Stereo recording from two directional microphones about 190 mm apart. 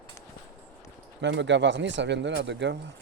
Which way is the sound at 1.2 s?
70° right (ahead or behind).